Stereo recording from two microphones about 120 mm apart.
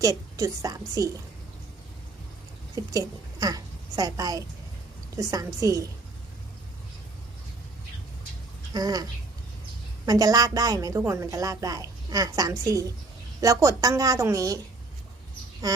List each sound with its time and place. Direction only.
0.0 s a woman's voice: 30° right (ahead or behind)
2.7 s a woman's voice: 30° right (ahead or behind)
8.7 s speech: 30° right (ahead or behind)
10.1 s a woman's voice: 30° right (ahead or behind)
15.6 s a woman's voice: 30° right (ahead or behind)